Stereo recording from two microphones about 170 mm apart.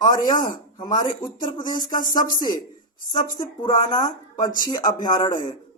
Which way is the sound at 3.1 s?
25° left (ahead or behind).